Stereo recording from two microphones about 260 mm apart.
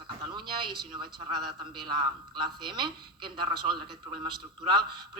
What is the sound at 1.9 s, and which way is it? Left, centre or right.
A man's voice, centre.